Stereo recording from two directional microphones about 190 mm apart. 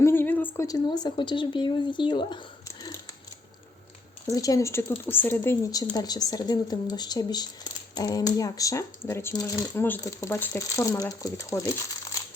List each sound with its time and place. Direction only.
0.0 s a woman's voice: 10° left (ahead or behind)
2.8 s a sound: 20° left (ahead or behind)
4.3 s speech: 20° left (ahead or behind)